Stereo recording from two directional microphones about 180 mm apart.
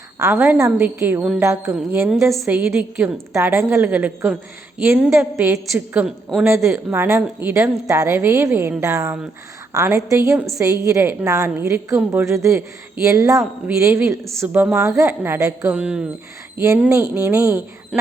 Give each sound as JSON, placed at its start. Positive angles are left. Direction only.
{"t": 0.2, "sound": "a woman's voice", "side_deg": -15}